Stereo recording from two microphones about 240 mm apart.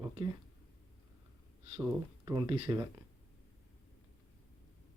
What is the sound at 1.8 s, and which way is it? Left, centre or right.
Speech, centre.